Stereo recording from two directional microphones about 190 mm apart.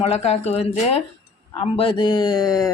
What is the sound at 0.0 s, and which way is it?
Speech, 35° left (ahead or behind).